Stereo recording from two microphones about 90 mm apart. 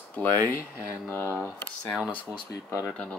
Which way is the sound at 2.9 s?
10° left (ahead or behind).